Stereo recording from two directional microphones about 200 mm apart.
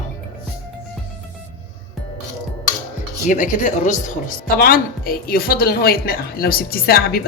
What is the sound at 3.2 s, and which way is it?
Speech, 40° left (ahead or behind).